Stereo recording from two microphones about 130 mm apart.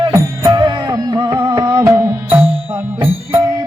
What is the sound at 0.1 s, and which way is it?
Music, 30° right (ahead or behind).